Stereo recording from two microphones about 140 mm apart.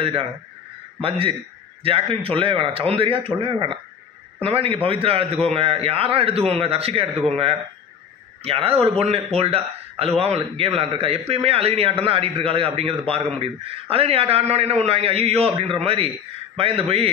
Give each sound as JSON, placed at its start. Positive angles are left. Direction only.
{"t": 0.0, "sound": "a man's voice", "side_deg": -40}